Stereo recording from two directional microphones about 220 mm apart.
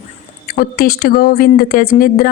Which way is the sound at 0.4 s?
40° left (ahead or behind).